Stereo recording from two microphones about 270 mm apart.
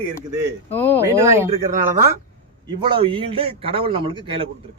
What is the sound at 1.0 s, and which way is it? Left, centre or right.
Speech, centre.